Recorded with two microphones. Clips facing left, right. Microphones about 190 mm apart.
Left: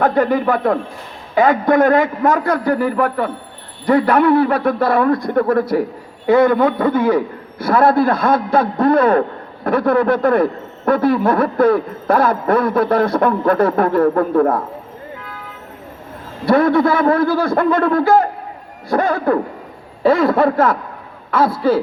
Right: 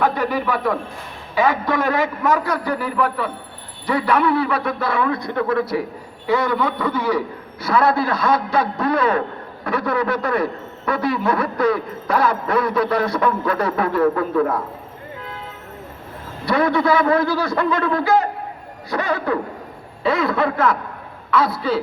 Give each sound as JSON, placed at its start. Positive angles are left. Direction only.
{"t": 0.0, "sound": "speech", "side_deg": 50}
{"t": 16.5, "sound": "a man's voice", "side_deg": 50}